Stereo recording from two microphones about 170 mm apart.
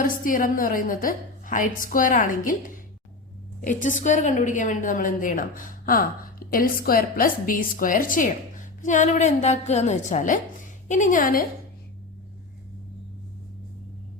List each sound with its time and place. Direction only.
0.0 s a woman's voice: 55° left (ahead or behind)